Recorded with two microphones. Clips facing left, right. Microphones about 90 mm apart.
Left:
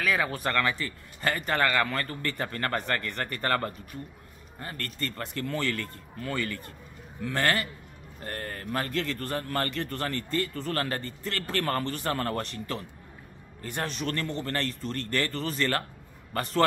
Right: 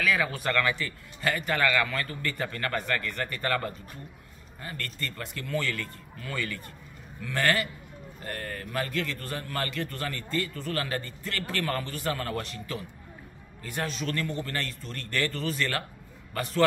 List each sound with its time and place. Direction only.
0.0 s a man's voice: 25° left (ahead or behind); by 12.4 s 45° left (ahead or behind)
12.5 s a man's voice: 55° left (ahead or behind)
14.0 s a man's voice: 40° left (ahead or behind)